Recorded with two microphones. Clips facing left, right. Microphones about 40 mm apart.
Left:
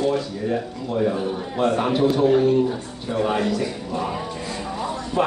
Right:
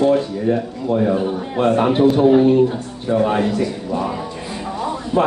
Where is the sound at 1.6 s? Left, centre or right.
Right.